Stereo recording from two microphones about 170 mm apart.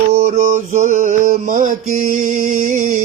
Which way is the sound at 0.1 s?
50° right (ahead or behind).